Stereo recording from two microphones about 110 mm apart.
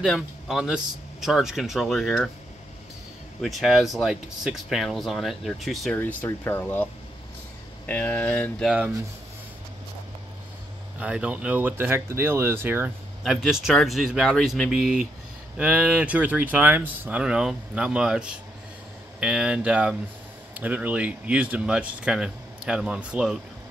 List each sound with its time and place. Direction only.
0.0 s speech: centre (ahead or behind)
3.3 s speech: centre (ahead or behind)
5.9 s speech: 20° left (ahead or behind)
11.0 s speech: 10° right (ahead or behind)
13.2 s speech: 5° right (ahead or behind)